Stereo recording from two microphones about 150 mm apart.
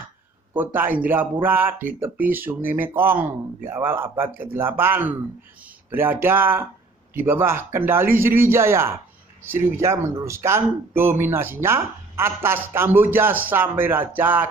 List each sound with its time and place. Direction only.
0.5 s speech: 15° right (ahead or behind)